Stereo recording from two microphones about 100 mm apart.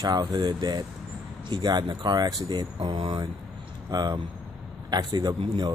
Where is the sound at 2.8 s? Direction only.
55° right (ahead or behind).